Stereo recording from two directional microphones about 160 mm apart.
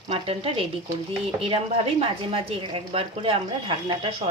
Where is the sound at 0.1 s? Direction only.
35° right (ahead or behind).